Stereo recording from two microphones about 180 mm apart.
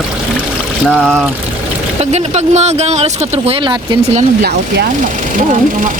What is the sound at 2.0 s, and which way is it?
Speech, 40° right (ahead or behind).